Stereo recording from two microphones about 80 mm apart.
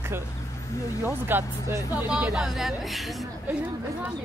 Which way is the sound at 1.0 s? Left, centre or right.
Right.